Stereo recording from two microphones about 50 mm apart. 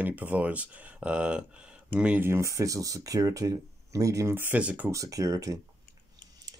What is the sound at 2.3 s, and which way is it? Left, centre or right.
Speech, right.